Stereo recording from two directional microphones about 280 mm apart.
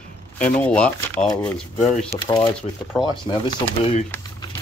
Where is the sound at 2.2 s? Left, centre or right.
Centre.